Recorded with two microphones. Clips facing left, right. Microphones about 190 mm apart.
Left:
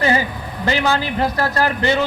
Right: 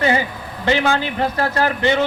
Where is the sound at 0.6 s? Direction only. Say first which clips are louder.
Right 1 dB; 40° left (ahead or behind).